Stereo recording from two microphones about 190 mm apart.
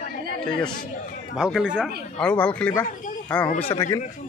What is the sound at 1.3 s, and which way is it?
Speech, 5° right (ahead or behind).